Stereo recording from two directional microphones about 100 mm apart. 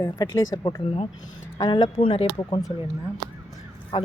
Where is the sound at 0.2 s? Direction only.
40° left (ahead or behind).